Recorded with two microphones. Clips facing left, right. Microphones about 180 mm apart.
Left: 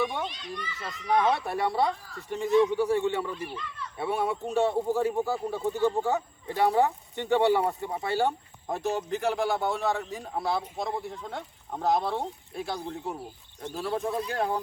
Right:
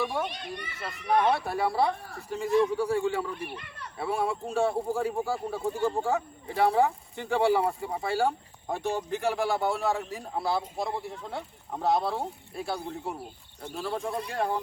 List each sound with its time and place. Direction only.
0.3 s a child's voice: 60° right (ahead or behind)
1.3 s speech: centre (ahead or behind)
1.9 s a child's voice: 60° right (ahead or behind)
2.3 s speech: centre (ahead or behind)
3.3 s a child's voice: 60° right (ahead or behind)
3.9 s speech: centre (ahead or behind)